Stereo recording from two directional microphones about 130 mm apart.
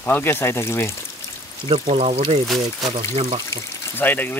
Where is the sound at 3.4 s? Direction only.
15° left (ahead or behind).